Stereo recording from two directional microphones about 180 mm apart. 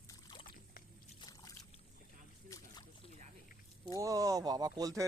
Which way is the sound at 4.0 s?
20° right (ahead or behind).